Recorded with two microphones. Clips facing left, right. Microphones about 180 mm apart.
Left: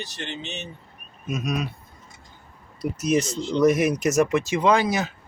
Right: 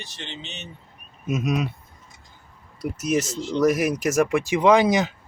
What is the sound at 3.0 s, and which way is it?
Speech, 5° right (ahead or behind).